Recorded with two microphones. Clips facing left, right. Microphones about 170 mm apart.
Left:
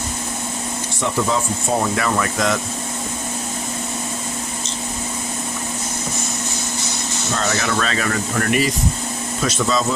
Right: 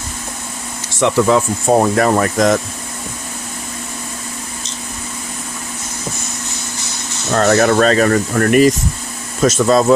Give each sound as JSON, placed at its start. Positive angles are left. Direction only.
{"t": 0.9, "sound": "speech", "side_deg": -80}
{"t": 1.8, "sound": "speech", "side_deg": -45}
{"t": 7.3, "sound": "speech", "side_deg": -50}